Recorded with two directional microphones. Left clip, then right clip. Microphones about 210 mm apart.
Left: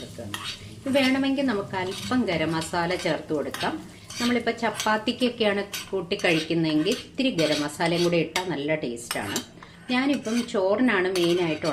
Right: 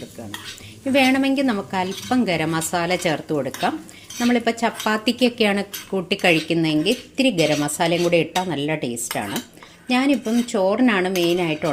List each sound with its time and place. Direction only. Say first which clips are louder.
0.9 s speech: right 5 dB; 45° right (ahead or behind)
4.2 s a woman's voice: right 5 dB; 45° right (ahead or behind)